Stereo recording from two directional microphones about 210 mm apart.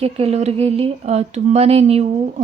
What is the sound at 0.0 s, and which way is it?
Speech, 30° right (ahead or behind).